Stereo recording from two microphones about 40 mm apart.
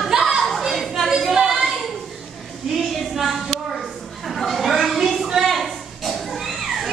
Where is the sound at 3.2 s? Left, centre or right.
Centre.